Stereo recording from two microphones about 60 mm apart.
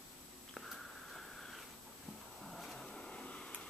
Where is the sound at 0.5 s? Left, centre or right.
Centre.